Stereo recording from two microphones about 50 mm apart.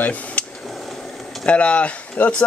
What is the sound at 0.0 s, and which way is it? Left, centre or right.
Speech, left.